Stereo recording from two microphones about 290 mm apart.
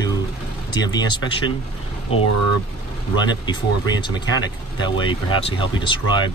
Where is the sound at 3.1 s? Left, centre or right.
Centre.